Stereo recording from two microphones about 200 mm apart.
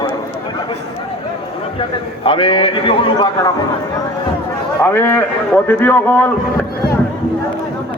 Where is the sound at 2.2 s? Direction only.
25° left (ahead or behind).